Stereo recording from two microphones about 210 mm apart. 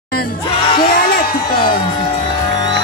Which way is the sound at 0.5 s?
25° left (ahead or behind).